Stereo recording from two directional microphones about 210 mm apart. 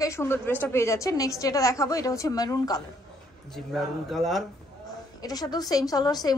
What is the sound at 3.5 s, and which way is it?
Speech, centre (ahead or behind).